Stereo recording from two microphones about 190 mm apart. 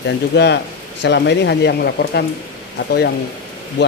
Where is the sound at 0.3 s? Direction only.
65° left (ahead or behind).